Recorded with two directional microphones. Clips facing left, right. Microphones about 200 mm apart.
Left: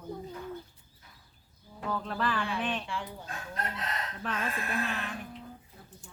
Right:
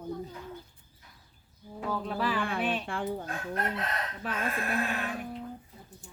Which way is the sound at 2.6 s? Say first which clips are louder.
Right 3 dB; 10° right (ahead or behind).